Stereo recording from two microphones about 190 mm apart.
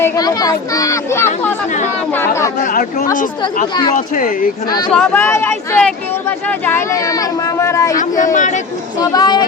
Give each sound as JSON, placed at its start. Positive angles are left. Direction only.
{"t": 0.0, "sound": "a child's voice", "side_deg": 20}
{"t": 2.6, "sound": "speech", "side_deg": 45}
{"t": 4.9, "sound": "speech", "side_deg": 10}
{"t": 7.9, "sound": "speech", "side_deg": 40}
{"t": 9.0, "sound": "a child's voice", "side_deg": 20}